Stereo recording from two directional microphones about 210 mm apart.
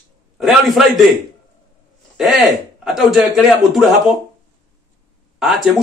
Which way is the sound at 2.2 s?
Centre (ahead or behind).